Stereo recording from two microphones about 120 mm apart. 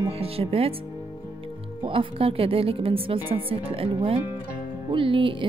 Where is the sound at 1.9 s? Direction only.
50° right (ahead or behind).